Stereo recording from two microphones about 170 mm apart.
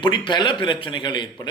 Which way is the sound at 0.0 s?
25° left (ahead or behind).